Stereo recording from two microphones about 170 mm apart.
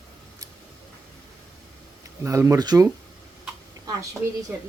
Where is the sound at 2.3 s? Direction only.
20° right (ahead or behind).